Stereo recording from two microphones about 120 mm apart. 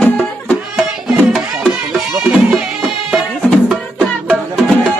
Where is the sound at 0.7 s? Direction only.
5° right (ahead or behind).